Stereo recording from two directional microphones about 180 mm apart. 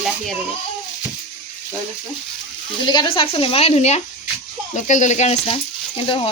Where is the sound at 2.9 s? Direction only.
25° left (ahead or behind).